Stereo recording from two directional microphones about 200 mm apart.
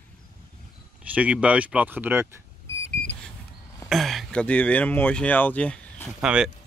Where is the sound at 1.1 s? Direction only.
5° right (ahead or behind).